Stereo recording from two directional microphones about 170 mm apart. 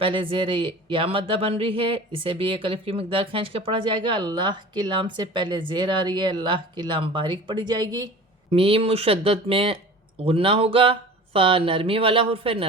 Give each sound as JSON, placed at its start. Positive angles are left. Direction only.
{"t": 0.0, "sound": "speech", "side_deg": -30}